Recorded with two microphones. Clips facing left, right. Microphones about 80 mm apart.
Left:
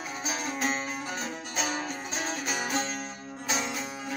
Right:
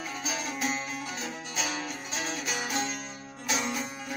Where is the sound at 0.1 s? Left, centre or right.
Left.